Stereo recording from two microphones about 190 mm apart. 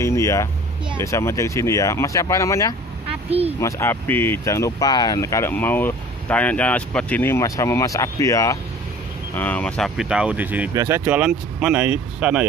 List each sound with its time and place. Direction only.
0.0 s vehicle: 15° left (ahead or behind)
0.9 s speech: 15° left (ahead or behind)
3.3 s speech: 30° right (ahead or behind)
3.6 s speech: 15° left (ahead or behind); by 12.4 s 5° right (ahead or behind)